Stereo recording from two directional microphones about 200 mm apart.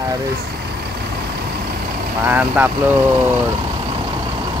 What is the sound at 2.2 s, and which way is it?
Speech, 10° right (ahead or behind).